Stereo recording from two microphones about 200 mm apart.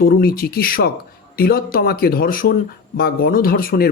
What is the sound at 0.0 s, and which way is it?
Speech, 50° left (ahead or behind).